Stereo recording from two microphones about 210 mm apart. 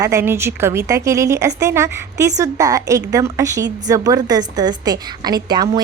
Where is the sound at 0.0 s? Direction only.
15° right (ahead or behind).